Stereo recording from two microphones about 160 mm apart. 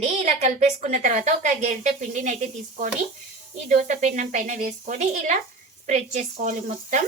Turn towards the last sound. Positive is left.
turn(degrees=-45)  # may be behind; listen again after turning